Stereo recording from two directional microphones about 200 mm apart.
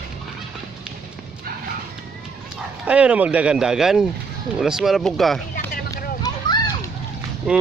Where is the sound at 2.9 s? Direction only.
5° right (ahead or behind).